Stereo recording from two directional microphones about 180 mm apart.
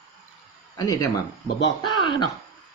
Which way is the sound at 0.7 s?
20° left (ahead or behind).